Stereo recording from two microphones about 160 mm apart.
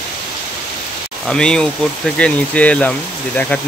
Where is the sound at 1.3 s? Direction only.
5° left (ahead or behind).